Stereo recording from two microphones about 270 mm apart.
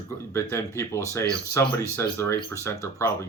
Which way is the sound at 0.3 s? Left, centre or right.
Centre.